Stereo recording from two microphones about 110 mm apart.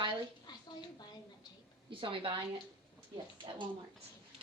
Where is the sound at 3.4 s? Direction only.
50° right (ahead or behind).